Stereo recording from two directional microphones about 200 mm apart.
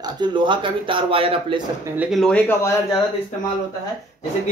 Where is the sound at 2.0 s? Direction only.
Centre (ahead or behind).